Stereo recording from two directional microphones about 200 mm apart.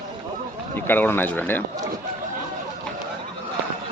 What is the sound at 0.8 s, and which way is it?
Speech, 10° left (ahead or behind).